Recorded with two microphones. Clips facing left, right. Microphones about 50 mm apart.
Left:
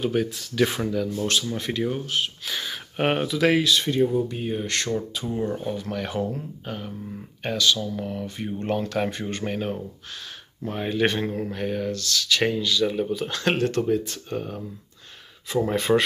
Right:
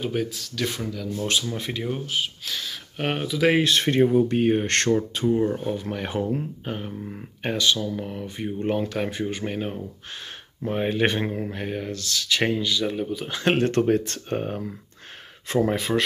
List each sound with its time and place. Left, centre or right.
0.0 s speech: centre
0.6 s speech: centre
1.2 s speech: centre
2.4 s speech: centre
3.5 s speech: right
5.6 s speech: centre
10.6 s speech: centre
12.8 s speech: centre
13.3 s speech: centre
13.6 s speech: right
13.8 s speech: right
15.9 s speech: centre